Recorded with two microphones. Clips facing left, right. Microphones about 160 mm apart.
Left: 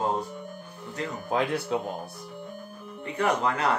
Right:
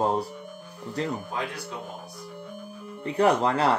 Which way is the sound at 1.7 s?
90° left.